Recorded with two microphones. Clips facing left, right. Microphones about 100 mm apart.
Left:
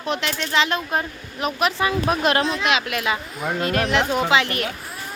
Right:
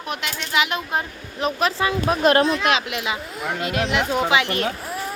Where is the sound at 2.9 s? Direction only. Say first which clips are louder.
Left 2 dB; 20° right (ahead or behind).